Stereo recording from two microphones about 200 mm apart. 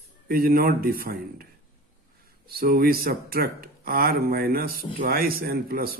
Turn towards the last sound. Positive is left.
turn(degrees=-45)  # may be behind; listen again after turning